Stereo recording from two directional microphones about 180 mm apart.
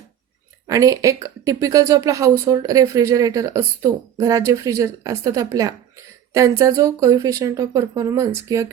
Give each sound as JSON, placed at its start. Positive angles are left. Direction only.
{"t": 0.7, "sound": "speech", "side_deg": -20}